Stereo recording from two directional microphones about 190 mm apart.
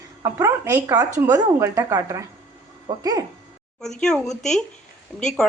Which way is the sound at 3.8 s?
Centre (ahead or behind).